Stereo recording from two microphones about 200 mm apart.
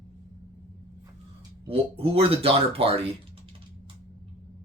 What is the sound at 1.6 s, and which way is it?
Speech, 30° right (ahead or behind).